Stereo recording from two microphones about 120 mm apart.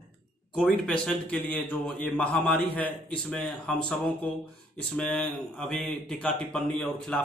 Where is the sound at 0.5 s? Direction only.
10° left (ahead or behind).